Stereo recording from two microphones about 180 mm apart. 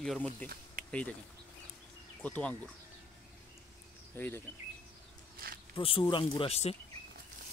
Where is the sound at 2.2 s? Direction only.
5° left (ahead or behind).